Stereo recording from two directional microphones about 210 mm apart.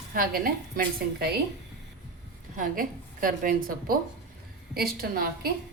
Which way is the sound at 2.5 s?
40° right (ahead or behind).